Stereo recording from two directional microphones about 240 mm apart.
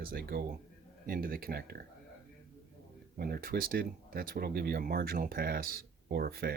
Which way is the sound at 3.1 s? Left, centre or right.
Right.